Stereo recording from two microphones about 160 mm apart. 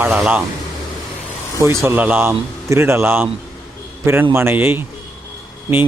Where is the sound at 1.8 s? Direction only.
10° right (ahead or behind).